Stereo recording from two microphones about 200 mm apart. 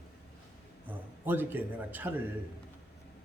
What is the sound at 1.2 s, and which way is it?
A man's voice, 10° right (ahead or behind).